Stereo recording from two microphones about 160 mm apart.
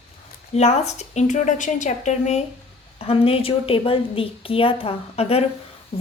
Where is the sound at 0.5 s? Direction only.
45° left (ahead or behind).